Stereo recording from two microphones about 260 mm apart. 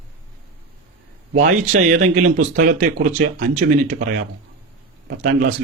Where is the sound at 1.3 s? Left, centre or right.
Right.